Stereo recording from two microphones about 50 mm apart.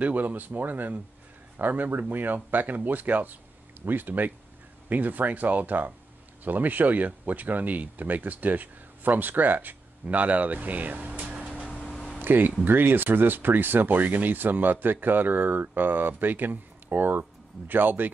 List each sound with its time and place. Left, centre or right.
0.0 s speech: right
11.6 s a sound: centre
12.2 s speech: right